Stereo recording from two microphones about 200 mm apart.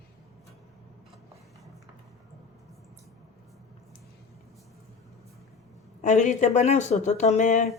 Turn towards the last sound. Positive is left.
turn(degrees=40)  # may be behind; listen again after turning